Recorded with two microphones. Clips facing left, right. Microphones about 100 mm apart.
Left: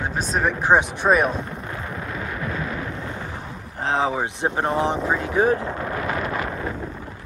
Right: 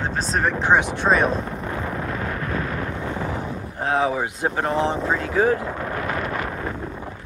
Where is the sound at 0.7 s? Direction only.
15° left (ahead or behind).